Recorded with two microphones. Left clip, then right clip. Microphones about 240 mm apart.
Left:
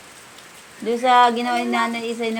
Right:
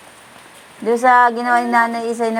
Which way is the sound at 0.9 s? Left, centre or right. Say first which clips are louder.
Right 3 dB; centre.